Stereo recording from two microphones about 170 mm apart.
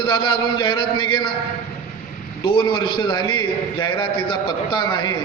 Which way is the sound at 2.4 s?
30° left (ahead or behind).